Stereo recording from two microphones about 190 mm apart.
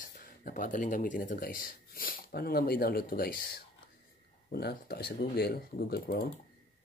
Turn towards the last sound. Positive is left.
turn(degrees=55)  # may be behind; listen again after turning